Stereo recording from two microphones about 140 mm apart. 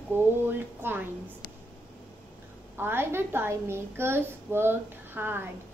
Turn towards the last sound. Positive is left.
turn(degrees=-15)  # may be behind; listen again after turning